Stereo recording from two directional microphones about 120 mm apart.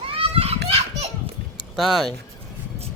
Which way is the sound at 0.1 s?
50° right (ahead or behind).